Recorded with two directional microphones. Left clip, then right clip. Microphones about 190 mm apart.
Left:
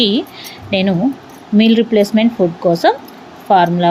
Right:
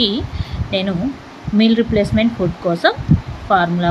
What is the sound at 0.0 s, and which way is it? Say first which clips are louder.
Speech: left 3 dB; 20° left (ahead or behind).